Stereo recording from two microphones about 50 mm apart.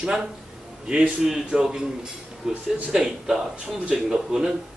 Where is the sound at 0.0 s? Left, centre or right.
Centre.